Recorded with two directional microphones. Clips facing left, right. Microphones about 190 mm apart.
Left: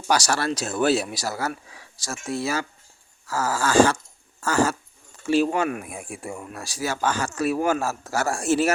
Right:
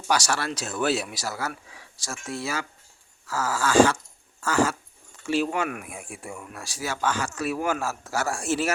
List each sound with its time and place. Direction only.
0.1 s speech: 40° left (ahead or behind)